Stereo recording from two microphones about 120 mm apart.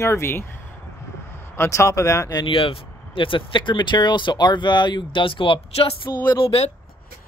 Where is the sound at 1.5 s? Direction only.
25° left (ahead or behind).